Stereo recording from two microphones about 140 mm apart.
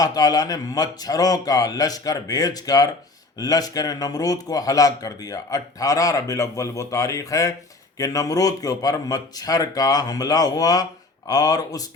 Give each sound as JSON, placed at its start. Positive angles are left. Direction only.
{"t": 0.0, "sound": "speech", "side_deg": 25}